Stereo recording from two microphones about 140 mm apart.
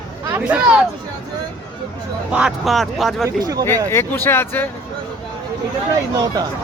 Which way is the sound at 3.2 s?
25° right (ahead or behind).